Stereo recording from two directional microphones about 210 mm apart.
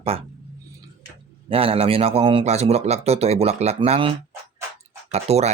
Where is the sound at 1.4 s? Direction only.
25° right (ahead or behind).